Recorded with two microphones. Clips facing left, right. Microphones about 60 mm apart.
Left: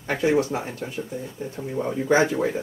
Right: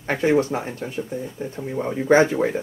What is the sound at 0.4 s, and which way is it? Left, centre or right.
Speech, right.